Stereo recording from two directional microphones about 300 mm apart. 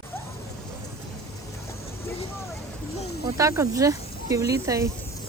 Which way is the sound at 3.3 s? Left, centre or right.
Centre.